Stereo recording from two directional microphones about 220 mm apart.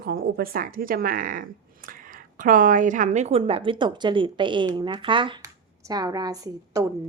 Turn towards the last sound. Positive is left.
turn(degrees=-15)  # may be behind; listen again after turning